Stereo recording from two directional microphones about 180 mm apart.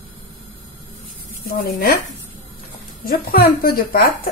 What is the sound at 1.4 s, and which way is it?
Speech, 55° left (ahead or behind).